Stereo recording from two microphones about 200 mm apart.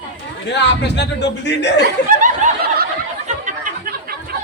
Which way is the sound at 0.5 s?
60° left (ahead or behind).